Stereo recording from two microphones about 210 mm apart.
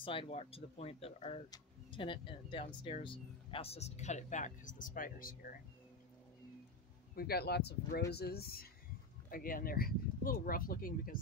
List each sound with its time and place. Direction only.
0.0 s speech: 25° left (ahead or behind); by 5.6 s 40° left (ahead or behind)
7.2 s speech: 50° left (ahead or behind)